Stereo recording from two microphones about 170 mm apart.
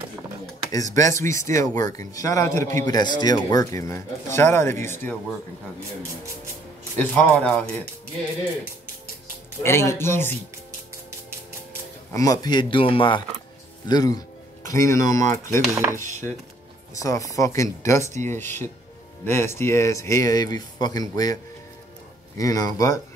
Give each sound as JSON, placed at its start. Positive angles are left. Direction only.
{"t": 0.9, "sound": "speech", "side_deg": 20}
{"t": 7.0, "sound": "speech", "side_deg": 10}
{"t": 9.6, "sound": "speech", "side_deg": 15}
{"t": 12.1, "sound": "speech", "side_deg": 20}
{"t": 15.7, "sound": "dishes", "side_deg": -15}
{"t": 16.9, "sound": "speech", "side_deg": 20}
{"t": 22.4, "sound": "speech", "side_deg": 20}